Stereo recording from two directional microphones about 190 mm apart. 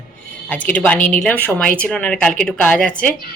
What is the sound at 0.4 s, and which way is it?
Speech, 10° left (ahead or behind).